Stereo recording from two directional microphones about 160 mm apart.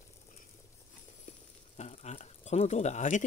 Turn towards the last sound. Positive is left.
turn(degrees=50)  # may be behind; listen again after turning